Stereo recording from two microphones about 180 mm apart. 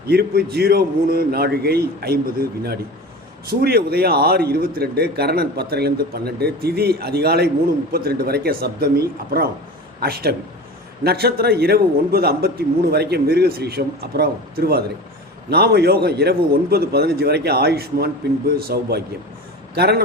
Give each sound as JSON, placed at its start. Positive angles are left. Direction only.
{"t": 0.1, "sound": "a man's voice", "side_deg": -60}